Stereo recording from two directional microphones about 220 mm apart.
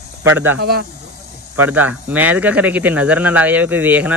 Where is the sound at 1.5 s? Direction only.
10° right (ahead or behind).